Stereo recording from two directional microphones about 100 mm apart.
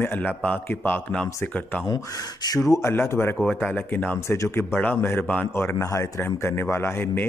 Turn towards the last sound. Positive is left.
turn(degrees=20)  # may be behind; listen again after turning